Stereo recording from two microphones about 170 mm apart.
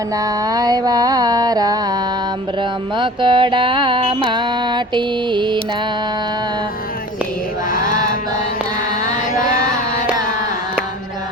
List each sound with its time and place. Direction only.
0.2 s music: 20° right (ahead or behind)
7.7 s chant: 50° left (ahead or behind)